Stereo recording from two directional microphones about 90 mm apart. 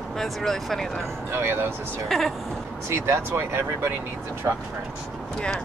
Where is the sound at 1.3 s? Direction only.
25° right (ahead or behind).